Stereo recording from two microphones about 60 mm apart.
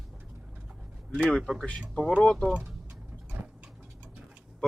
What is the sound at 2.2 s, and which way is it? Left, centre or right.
Speech, centre.